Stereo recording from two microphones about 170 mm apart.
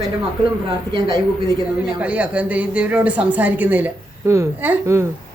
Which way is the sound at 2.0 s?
10° right (ahead or behind).